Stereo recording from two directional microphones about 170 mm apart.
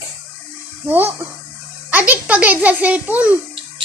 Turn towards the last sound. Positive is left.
turn(degrees=-10)  # may be behind; listen again after turning